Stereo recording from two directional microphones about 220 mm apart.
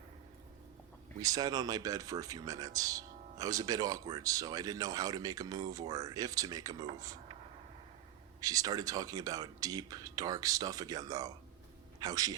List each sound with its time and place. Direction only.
1.2 s speech: 15° right (ahead or behind)
8.4 s a man's voice: 15° right (ahead or behind)